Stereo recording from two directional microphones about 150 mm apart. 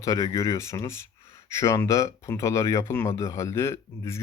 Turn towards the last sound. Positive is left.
turn(degrees=20)  # may be behind; listen again after turning